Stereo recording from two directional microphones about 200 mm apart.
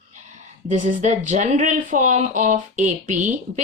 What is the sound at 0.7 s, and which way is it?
Speech, 40° right (ahead or behind).